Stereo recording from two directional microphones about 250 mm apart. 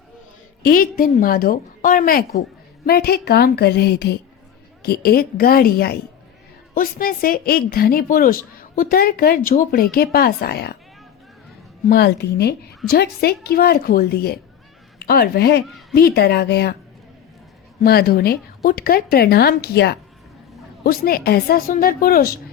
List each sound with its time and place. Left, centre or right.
0.7 s a woman's voice: left
11.9 s a woman's voice: left
17.7 s a woman's voice: left